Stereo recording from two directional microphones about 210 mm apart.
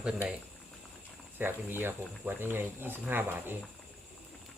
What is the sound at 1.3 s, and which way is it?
Speech, 10° right (ahead or behind).